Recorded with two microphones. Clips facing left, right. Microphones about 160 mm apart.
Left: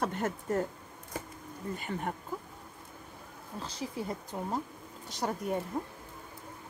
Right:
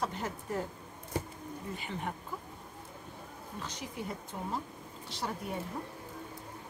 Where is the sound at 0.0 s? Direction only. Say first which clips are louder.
Left 4 dB; 55° left (ahead or behind).